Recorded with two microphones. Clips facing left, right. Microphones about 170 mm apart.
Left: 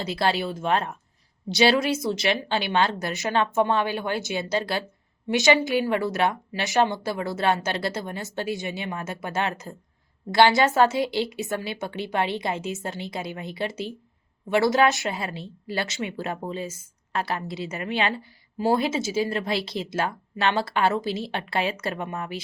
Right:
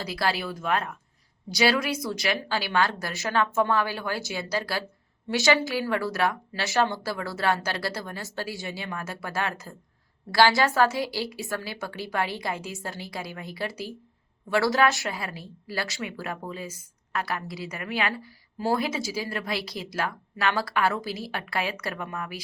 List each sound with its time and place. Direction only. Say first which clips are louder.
0.0 s a woman's voice: left 4 dB; 25° left (ahead or behind)